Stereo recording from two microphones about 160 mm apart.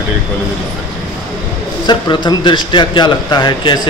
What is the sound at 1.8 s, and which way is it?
Speech, 25° left (ahead or behind).